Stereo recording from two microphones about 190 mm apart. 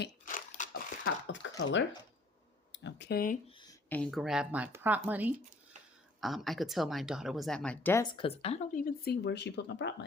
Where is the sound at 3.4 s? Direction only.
25° left (ahead or behind).